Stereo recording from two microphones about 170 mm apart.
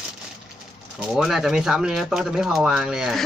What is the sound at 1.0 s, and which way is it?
Speech, 5° right (ahead or behind).